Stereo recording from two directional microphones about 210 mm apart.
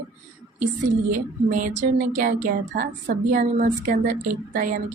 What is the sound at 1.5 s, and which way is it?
A woman's voice, 40° right (ahead or behind).